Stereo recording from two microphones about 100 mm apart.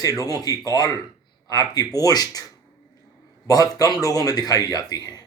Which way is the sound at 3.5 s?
40° left (ahead or behind).